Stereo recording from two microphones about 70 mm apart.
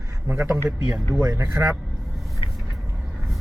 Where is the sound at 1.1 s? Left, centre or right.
Right.